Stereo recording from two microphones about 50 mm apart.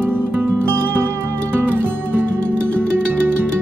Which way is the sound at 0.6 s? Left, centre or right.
Right.